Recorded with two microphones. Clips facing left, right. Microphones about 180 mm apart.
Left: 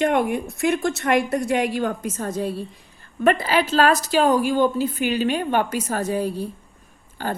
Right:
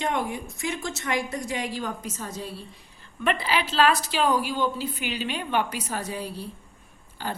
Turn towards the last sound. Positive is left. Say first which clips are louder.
# left 5 dB
turn(degrees=50)  # may be behind; listen again after turning